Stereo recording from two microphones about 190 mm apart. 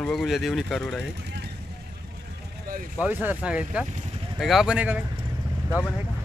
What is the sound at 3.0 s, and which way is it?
Speech, 10° right (ahead or behind).